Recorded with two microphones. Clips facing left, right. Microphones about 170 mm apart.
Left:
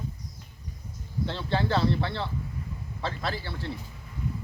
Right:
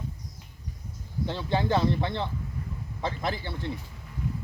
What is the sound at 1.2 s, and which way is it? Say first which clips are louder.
Speech: right 1 dB; 15° right (ahead or behind).